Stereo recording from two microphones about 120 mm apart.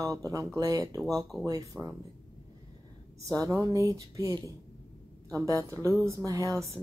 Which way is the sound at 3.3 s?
25° right (ahead or behind).